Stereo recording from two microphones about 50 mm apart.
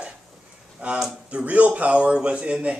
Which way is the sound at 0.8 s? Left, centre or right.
Right.